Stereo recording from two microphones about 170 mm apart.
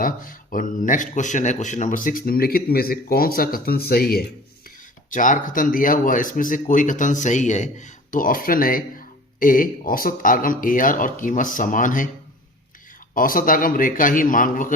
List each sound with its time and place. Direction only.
0.0 s speech: 55° left (ahead or behind)
5.1 s speech: 50° left (ahead or behind)
13.1 s speech: 55° left (ahead or behind)